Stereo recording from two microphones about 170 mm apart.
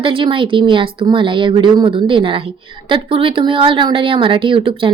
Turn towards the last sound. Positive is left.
turn(degrees=-30)  # may be behind; listen again after turning